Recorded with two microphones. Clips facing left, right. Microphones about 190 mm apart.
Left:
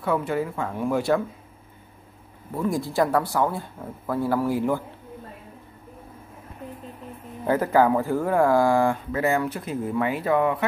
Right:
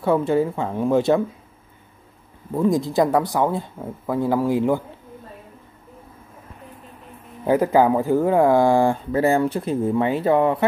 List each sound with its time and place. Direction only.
0.0 s speech: 30° right (ahead or behind)
2.5 s speech: 20° right (ahead or behind)
7.4 s speech: 15° right (ahead or behind)